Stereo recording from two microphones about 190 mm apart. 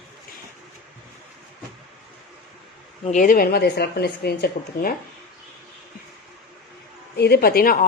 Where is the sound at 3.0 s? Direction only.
40° left (ahead or behind); by 4.9 s 55° left (ahead or behind).